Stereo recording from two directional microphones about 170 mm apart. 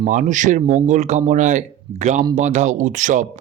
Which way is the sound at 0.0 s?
45° right (ahead or behind).